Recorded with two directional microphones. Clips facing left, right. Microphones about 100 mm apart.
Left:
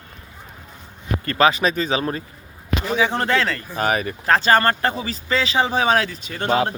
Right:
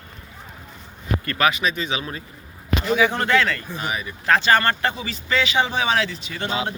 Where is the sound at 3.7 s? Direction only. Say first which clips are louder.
Left 7 dB; 60° left (ahead or behind).